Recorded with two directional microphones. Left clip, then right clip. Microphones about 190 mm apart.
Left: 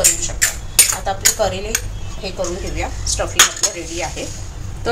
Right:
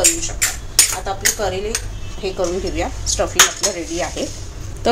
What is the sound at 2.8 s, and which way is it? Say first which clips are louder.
Speech: left 1 dB; 35° right (ahead or behind).